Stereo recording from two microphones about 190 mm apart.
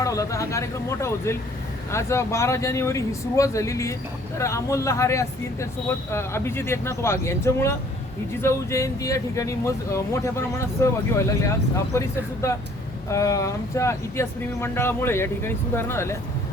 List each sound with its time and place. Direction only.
0.0 s speech: 15° left (ahead or behind)